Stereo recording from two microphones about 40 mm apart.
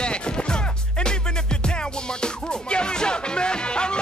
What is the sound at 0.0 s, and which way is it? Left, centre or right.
Music, left.